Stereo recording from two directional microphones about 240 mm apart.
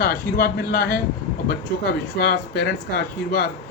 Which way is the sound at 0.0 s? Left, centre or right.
Left.